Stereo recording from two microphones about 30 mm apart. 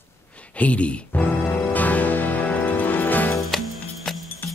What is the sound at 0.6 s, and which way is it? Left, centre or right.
Speech, left.